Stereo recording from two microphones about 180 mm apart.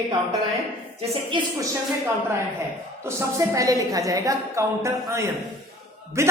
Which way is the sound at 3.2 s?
15° right (ahead or behind).